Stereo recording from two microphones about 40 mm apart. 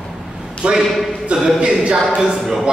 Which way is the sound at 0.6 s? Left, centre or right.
Right.